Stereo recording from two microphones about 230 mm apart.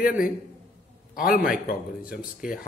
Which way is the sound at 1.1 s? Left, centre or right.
Left.